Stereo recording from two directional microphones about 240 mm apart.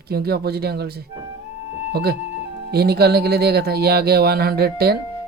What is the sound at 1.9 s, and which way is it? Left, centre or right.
Speech, right.